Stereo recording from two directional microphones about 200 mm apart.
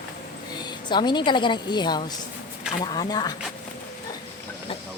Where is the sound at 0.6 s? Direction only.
20° left (ahead or behind).